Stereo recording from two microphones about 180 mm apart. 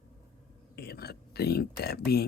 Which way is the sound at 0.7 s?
60° left (ahead or behind).